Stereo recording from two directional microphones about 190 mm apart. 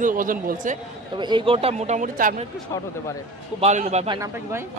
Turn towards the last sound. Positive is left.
turn(degrees=-15)  # may be behind; listen again after turning